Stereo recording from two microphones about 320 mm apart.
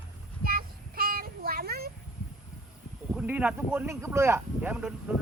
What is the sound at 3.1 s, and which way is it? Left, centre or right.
Speech, centre.